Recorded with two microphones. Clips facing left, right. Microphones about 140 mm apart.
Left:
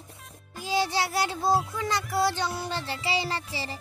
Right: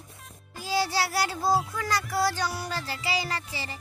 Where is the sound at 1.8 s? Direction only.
20° left (ahead or behind).